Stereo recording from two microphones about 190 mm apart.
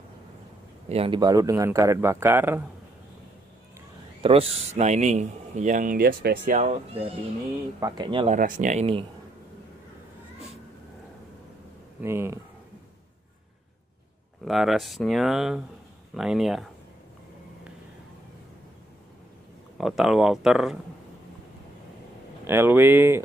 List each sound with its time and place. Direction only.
0.8 s a man's voice: 30° right (ahead or behind); by 2.6 s 10° right (ahead or behind)
4.2 s speech: 30° right (ahead or behind)
7.8 s speech: 25° right (ahead or behind)
8.3 s speech: 45° right (ahead or behind)
12.0 s a man's voice: 15° right (ahead or behind)
14.4 s speech: centre (ahead or behind)
19.8 s speech: centre (ahead or behind)
22.5 s a man's voice: 10° right (ahead or behind)